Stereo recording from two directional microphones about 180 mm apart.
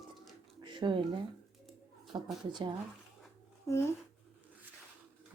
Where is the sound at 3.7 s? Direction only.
15° left (ahead or behind).